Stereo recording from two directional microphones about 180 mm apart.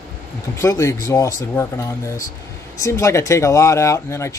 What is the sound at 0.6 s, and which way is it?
Speech, 15° left (ahead or behind).